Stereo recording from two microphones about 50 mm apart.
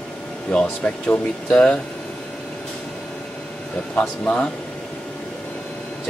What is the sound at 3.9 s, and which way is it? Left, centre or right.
Speech, left.